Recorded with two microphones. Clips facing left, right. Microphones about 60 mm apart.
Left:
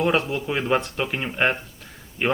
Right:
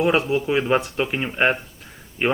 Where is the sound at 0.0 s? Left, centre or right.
Centre.